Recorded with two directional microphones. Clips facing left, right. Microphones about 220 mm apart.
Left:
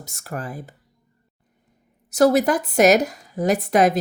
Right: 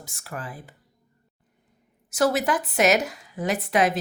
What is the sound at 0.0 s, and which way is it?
Speech, 40° left (ahead or behind).